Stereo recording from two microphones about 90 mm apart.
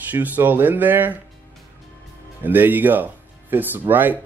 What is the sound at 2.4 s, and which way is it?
Speech, 20° right (ahead or behind).